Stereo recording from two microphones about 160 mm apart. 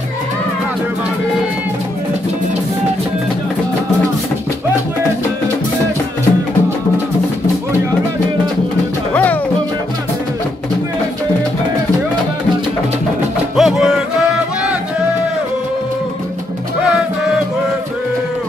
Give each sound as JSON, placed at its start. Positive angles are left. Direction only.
{"t": 9.1, "sound": "music", "side_deg": 10}
{"t": 13.6, "sound": "music", "side_deg": 0}